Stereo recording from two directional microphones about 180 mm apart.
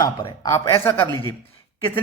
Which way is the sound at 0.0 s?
15° left (ahead or behind).